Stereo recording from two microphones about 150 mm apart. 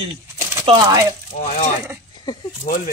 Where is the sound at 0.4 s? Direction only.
15° right (ahead or behind).